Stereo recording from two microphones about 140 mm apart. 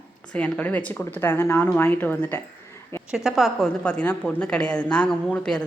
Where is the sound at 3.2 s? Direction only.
Centre (ahead or behind).